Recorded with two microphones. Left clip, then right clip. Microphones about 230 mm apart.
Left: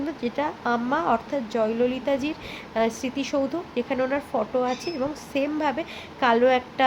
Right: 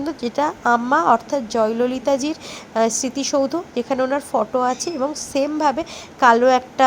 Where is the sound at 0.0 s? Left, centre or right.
Right.